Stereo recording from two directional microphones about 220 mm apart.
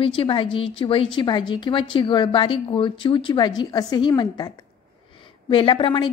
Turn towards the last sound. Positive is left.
turn(degrees=20)  # may be behind; listen again after turning